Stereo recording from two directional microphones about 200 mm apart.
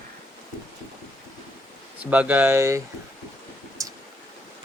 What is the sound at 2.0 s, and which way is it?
Speech, 5° right (ahead or behind).